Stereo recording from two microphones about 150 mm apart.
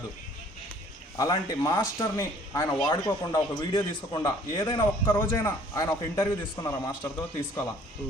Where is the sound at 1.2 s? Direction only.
25° left (ahead or behind).